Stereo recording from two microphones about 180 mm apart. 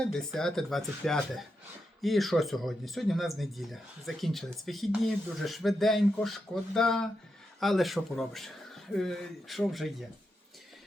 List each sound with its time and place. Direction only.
0.0 s speech: 5° left (ahead or behind)